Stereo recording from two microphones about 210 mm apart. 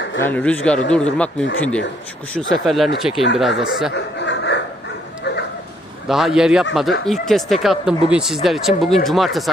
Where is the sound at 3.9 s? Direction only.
55° left (ahead or behind).